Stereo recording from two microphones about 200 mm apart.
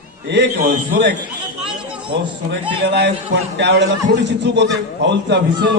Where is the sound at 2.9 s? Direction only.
55° right (ahead or behind).